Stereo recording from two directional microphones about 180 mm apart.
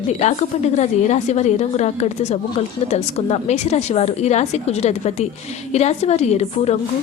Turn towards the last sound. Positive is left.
turn(degrees=35)  # may be behind; listen again after turning